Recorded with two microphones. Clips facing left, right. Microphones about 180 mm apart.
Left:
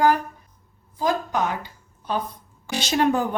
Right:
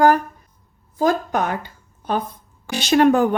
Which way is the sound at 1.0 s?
55° right (ahead or behind).